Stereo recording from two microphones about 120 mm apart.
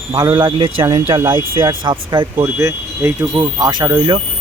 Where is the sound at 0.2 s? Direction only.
35° right (ahead or behind).